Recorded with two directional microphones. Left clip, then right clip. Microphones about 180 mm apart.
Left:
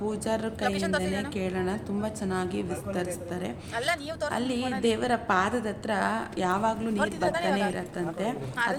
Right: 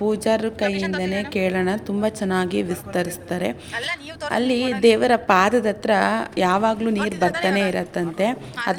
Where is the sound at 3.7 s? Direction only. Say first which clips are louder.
Right 2 dB; 30° left (ahead or behind).